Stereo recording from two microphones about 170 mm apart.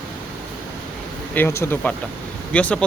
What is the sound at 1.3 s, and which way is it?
Speech, 15° left (ahead or behind).